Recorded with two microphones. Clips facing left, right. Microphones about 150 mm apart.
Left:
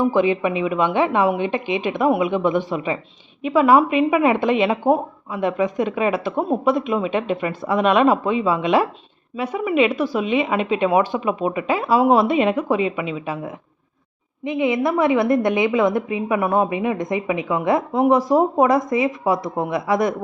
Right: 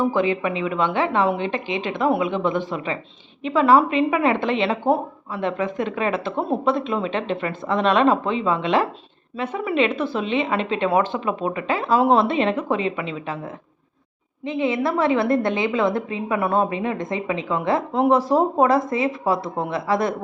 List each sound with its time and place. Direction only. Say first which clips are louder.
0.0 s a woman's voice: left 3 dB; 20° left (ahead or behind)